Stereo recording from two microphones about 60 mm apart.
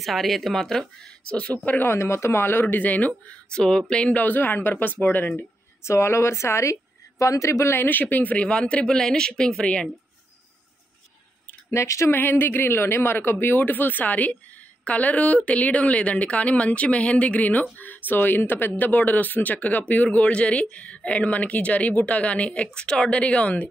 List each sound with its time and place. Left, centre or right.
0.0 s speech: centre
1.3 s a woman's voice: left
1.9 s speech: left
2.6 s a woman's voice: left
5.9 s speech: left
7.7 s speech: left; by 9.8 s centre
11.7 s speech: left
12.1 s a woman's voice: left